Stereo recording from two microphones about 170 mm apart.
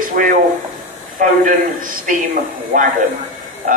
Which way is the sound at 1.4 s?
50° right (ahead or behind).